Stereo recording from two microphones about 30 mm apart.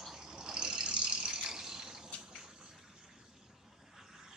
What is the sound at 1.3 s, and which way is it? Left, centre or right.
Rattle, right.